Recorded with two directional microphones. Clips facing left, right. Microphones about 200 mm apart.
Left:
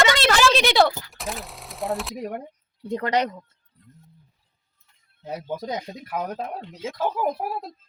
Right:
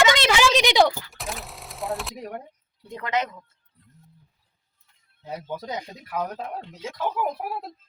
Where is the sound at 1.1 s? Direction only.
Centre (ahead or behind).